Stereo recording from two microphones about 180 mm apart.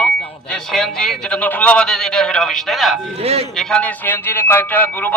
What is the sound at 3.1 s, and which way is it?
Speech, 35° right (ahead or behind).